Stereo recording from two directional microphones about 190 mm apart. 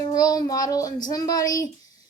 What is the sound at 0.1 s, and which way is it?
A child's voice, 20° left (ahead or behind).